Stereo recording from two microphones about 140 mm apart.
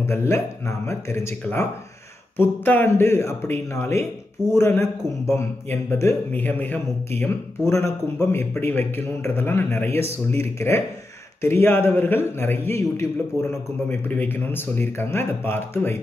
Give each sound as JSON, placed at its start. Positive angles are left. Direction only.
{"t": 0.0, "sound": "a man's voice", "side_deg": 20}